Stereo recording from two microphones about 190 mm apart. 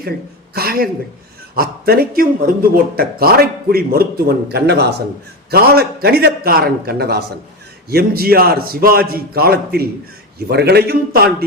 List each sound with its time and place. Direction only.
0.5 s a man's voice: 50° right (ahead or behind)